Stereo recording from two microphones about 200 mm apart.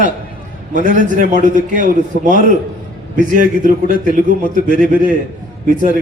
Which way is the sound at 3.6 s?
40° right (ahead or behind).